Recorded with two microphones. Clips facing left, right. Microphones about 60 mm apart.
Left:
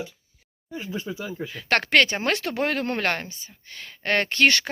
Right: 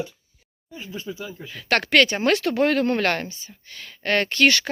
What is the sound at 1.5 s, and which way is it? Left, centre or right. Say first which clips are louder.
Speech: right 1 dB; left.